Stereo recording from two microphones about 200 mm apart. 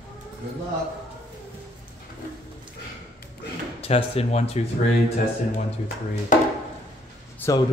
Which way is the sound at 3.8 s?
30° left (ahead or behind).